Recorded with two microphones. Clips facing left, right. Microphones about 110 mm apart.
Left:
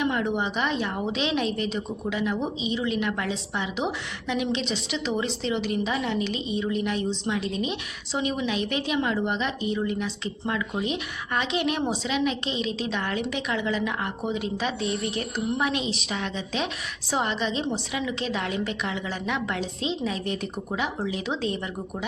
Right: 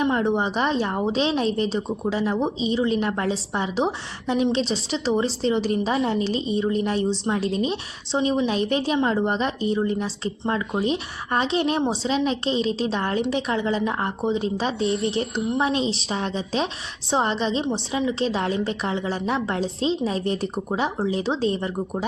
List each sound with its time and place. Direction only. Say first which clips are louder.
0.0 s a woman's voice: right 4 dB; 30° right (ahead or behind)